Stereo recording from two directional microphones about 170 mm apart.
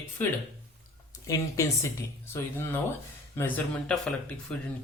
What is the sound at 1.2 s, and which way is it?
Speech, 20° left (ahead or behind).